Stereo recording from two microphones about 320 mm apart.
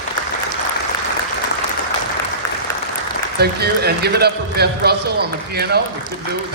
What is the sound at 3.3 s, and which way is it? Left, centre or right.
A man's voice, right.